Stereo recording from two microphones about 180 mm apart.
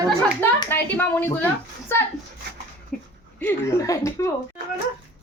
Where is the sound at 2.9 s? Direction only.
5° left (ahead or behind).